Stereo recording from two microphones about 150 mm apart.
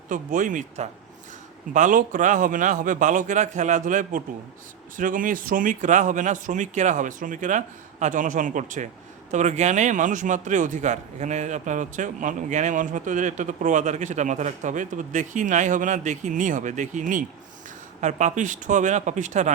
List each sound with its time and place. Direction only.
0.1 s speech: 60° right (ahead or behind)